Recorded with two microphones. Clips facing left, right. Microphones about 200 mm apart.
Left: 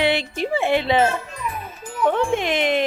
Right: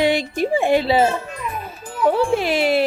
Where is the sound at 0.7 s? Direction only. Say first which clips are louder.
Right 1 dB; 35° right (ahead or behind).